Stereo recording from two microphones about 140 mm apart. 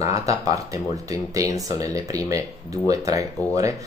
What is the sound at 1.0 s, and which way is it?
Speech, 25° right (ahead or behind).